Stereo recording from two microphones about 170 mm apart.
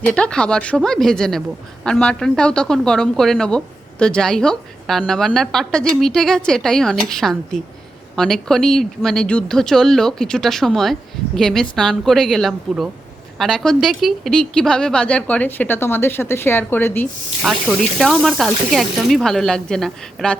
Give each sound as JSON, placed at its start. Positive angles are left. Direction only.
{"t": 0.0, "sound": "speech", "side_deg": 5}
{"t": 17.4, "sound": "speech", "side_deg": 0}